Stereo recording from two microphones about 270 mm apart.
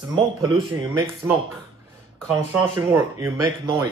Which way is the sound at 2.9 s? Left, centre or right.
Centre.